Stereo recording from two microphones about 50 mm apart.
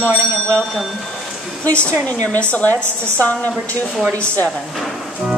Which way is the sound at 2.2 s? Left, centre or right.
Left.